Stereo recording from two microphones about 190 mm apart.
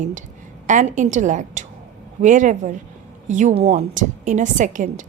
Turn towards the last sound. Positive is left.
turn(degrees=-45)  # may be behind; listen again after turning